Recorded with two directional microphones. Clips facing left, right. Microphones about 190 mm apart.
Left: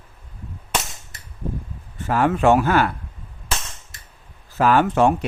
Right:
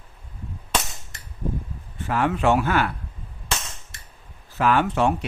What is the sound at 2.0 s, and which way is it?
Speech, 45° left (ahead or behind).